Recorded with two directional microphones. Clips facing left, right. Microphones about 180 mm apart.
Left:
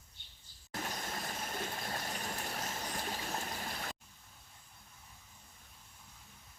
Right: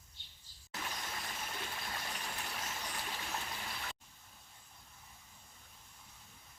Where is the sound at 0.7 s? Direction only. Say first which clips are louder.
Left 3 dB; 45° left (ahead or behind).